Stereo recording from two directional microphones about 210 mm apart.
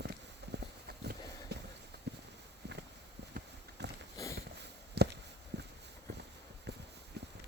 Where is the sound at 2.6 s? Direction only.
55° right (ahead or behind).